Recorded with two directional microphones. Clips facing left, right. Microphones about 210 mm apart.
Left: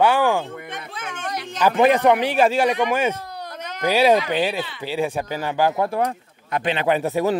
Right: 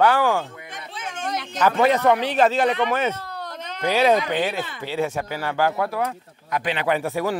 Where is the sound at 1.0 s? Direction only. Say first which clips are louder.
Even; 55° left (ahead or behind).